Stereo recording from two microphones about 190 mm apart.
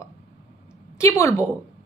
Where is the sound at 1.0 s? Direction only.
15° left (ahead or behind).